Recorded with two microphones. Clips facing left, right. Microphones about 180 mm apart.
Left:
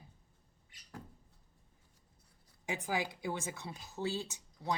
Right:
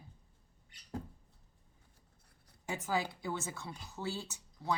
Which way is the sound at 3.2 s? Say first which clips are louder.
Left 1 dB; 15° left (ahead or behind).